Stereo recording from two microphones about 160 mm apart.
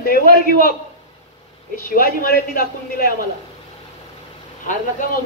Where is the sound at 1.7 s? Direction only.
65° left (ahead or behind).